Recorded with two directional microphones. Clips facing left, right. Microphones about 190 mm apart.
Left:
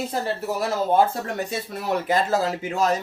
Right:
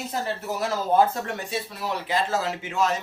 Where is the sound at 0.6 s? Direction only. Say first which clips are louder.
Left 1 dB; 25° left (ahead or behind).